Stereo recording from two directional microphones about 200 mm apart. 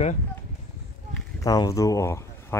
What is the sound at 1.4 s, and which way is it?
Speech, 15° left (ahead or behind).